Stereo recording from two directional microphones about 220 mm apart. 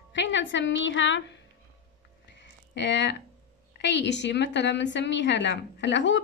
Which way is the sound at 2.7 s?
50° left (ahead or behind).